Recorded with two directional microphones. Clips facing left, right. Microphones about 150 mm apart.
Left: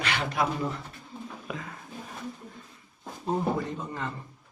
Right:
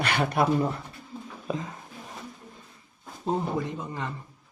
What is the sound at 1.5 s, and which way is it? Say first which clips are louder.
Whispering: right 7 dB; 25° right (ahead or behind).